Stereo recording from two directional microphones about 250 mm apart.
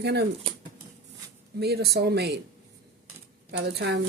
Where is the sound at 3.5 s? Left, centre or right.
Right.